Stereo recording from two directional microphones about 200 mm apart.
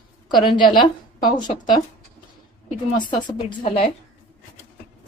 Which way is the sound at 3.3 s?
25° left (ahead or behind).